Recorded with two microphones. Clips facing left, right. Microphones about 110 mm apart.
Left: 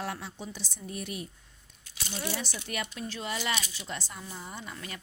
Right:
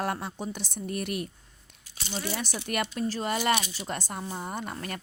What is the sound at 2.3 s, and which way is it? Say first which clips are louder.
Speech: right 5 dB; 55° right (ahead or behind).